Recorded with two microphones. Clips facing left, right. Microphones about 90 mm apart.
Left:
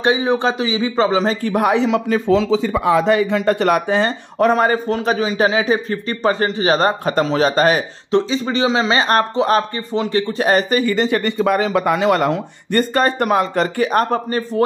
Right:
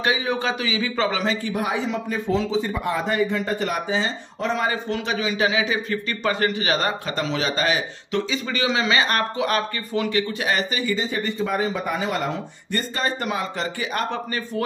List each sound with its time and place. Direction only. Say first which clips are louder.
0.0 s a man's voice: left 7 dB; 30° left (ahead or behind)
1.3 s speech: left 8 dB; 55° left (ahead or behind)
8.1 s speech: left 8 dB; 30° left (ahead or behind)